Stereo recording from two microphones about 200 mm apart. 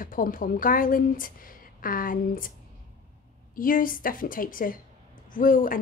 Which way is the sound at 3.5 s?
45° left (ahead or behind).